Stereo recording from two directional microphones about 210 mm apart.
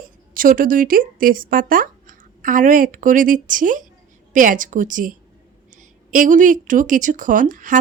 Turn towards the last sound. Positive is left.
turn(degrees=-40)  # may be behind; listen again after turning